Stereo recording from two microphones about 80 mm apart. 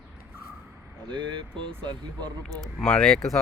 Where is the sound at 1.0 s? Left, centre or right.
Right.